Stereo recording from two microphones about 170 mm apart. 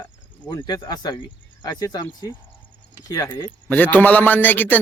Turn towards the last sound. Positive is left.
turn(degrees=10)  # may be behind; listen again after turning